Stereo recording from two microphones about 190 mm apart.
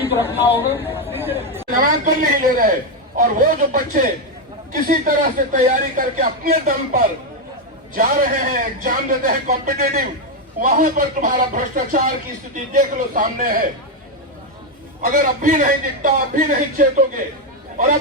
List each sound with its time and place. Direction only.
0.0 s a sound: 10° right (ahead or behind)
0.4 s speech: 10° right (ahead or behind)
2.3 s speech: 45° right (ahead or behind)
15.0 s speech: 45° right (ahead or behind)